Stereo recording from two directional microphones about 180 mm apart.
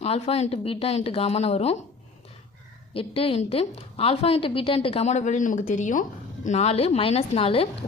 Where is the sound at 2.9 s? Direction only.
30° left (ahead or behind).